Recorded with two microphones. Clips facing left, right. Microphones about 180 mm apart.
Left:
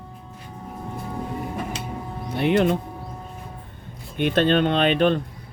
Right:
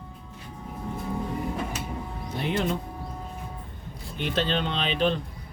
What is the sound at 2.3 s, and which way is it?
Speech, 65° left (ahead or behind).